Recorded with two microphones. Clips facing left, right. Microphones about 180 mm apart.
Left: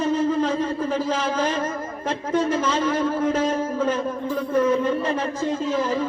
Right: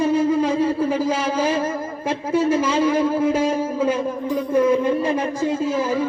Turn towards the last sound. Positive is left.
turn(degrees=-10)  # may be behind; listen again after turning